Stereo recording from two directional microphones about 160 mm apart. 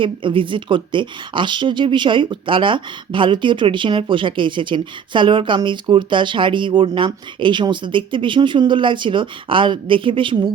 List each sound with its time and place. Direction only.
0.0 s a woman's voice: 30° right (ahead or behind)